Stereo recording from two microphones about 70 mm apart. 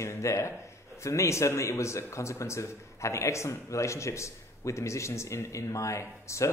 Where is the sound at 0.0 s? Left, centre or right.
Left.